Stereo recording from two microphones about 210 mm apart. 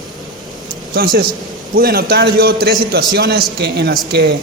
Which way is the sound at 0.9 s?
45° right (ahead or behind).